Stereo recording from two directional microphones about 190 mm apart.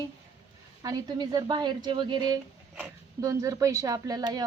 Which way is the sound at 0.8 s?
20° right (ahead or behind).